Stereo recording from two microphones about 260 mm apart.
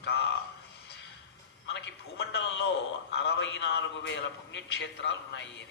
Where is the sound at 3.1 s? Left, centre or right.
Left.